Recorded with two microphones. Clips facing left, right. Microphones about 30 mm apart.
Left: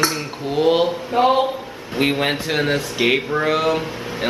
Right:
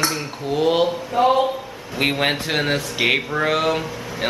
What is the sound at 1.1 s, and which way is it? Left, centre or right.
Speech, centre.